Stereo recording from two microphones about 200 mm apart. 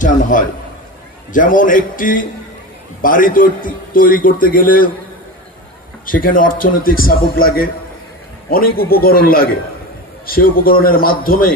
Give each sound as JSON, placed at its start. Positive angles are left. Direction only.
{"t": 0.0, "sound": "a man's voice", "side_deg": 40}
{"t": 6.0, "sound": "a man's voice", "side_deg": 45}